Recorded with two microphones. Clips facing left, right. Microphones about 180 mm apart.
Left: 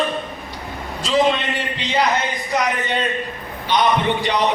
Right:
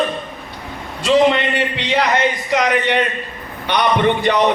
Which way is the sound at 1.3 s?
70° right (ahead or behind).